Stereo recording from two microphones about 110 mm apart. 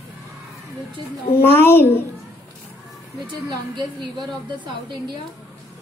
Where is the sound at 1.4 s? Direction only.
20° left (ahead or behind).